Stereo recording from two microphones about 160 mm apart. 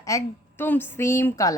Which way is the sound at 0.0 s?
15° left (ahead or behind).